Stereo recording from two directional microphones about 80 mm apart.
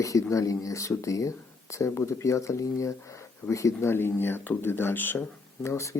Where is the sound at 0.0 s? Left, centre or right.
Left.